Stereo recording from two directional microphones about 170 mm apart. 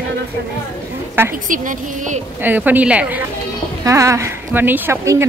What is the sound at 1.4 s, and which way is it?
Speech, 50° right (ahead or behind).